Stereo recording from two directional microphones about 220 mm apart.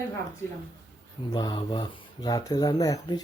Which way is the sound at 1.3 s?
20° left (ahead or behind).